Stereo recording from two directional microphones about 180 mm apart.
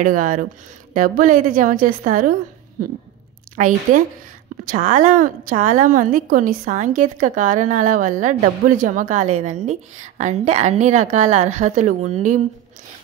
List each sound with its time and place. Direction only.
0.0 s a woman's voice: 45° right (ahead or behind)
3.5 s a woman's voice: 45° right (ahead or behind)